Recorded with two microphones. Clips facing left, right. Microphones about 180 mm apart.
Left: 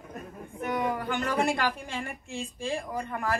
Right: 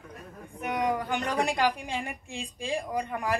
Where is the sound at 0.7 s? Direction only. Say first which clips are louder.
Right 1 dB; 15° right (ahead or behind).